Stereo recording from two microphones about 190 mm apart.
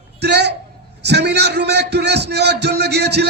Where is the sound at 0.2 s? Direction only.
60° right (ahead or behind).